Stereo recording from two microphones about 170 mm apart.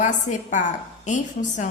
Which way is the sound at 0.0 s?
45° left (ahead or behind).